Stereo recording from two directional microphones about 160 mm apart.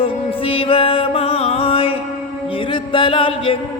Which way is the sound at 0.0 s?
35° left (ahead or behind).